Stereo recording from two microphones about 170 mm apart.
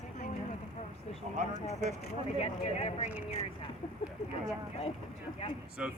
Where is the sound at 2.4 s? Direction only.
35° left (ahead or behind).